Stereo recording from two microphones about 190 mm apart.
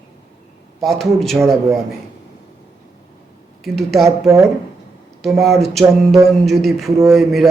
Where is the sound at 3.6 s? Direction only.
Centre (ahead or behind).